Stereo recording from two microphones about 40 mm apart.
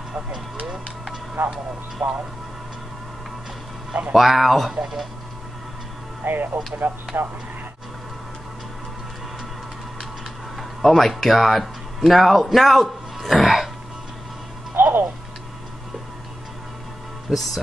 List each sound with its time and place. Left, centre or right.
1.5 s speech: right
4.1 s speech: centre
6.2 s speech: right
6.8 s speech: right
10.8 s a man's voice: centre
14.8 s music: right
17.3 s speech: centre